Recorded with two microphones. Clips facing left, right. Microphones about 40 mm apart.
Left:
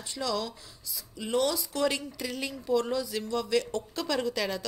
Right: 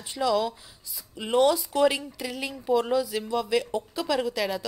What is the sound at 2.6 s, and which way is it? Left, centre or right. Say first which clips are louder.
Speech: right 4 dB; centre.